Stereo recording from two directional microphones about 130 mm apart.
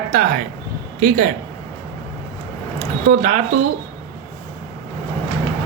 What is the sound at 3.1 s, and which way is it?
Speech, 70° right (ahead or behind).